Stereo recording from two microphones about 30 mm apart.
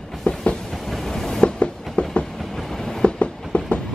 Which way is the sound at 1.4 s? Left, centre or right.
Left.